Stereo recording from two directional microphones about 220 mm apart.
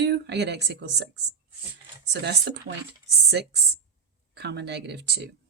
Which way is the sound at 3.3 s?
50° right (ahead or behind).